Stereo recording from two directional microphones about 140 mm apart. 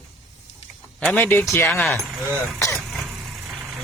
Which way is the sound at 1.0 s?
10° left (ahead or behind).